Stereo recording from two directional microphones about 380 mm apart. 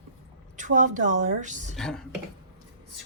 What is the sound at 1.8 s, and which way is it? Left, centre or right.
Speech, centre.